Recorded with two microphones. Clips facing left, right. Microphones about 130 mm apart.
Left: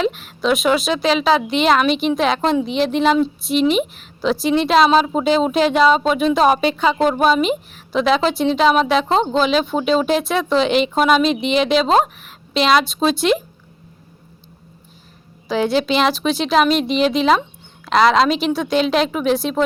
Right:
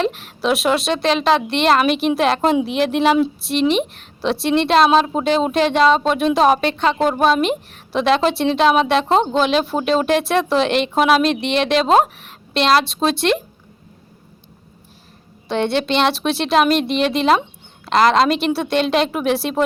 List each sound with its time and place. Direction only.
0.0 s a woman's voice: centre (ahead or behind)
15.4 s a woman's voice: centre (ahead or behind)